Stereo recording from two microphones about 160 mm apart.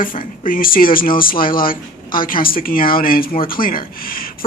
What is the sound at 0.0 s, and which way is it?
Speech, 60° left (ahead or behind).